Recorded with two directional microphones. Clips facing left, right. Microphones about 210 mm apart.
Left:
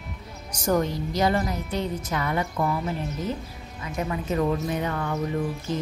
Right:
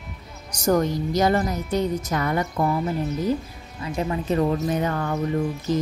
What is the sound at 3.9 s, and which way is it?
Speech, 35° right (ahead or behind).